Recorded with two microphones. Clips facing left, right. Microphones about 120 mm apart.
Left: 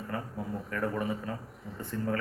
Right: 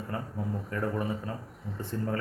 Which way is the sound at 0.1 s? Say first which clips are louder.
Even; 25° right (ahead or behind).